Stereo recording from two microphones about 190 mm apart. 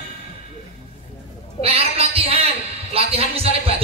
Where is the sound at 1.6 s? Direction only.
30° right (ahead or behind).